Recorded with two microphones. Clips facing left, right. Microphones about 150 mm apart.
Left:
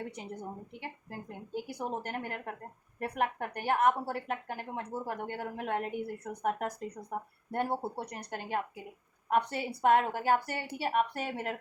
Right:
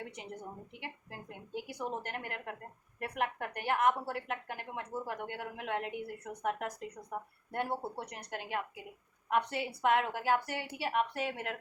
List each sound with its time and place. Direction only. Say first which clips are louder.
0.8 s a woman's voice: left 3 dB; 40° left (ahead or behind)